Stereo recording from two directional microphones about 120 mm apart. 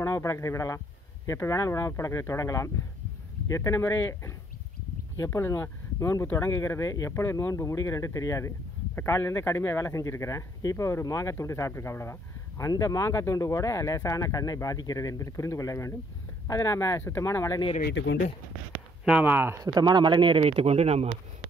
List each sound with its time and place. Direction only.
0.0 s speech: 25° left (ahead or behind)
18.7 s a sound: 10° right (ahead or behind)
19.6 s speech: 35° right (ahead or behind); by 21.2 s 60° right (ahead or behind)